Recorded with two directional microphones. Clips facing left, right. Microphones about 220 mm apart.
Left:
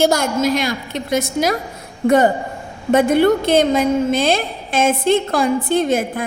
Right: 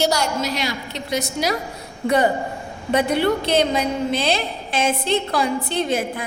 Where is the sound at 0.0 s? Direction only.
50° left (ahead or behind).